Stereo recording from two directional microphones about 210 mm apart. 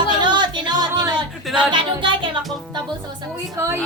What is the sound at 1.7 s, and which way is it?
Music, 25° right (ahead or behind).